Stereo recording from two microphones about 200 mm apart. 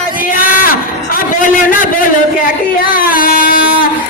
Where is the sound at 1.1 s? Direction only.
40° left (ahead or behind).